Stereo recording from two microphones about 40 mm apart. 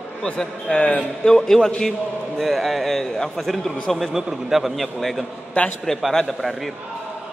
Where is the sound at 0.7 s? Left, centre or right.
Left.